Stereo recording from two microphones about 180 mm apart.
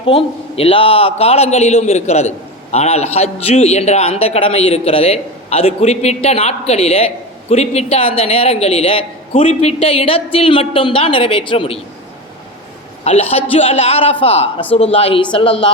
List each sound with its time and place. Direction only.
0.0 s a man's voice: 30° left (ahead or behind)
13.1 s a man's voice: 35° left (ahead or behind)